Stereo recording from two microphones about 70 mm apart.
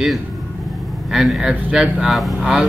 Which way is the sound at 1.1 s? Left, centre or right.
Centre.